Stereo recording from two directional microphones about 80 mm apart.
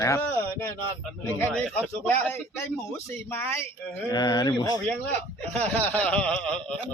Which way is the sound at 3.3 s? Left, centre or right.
Left.